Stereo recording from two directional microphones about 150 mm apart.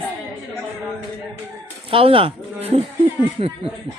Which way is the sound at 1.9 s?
35° right (ahead or behind).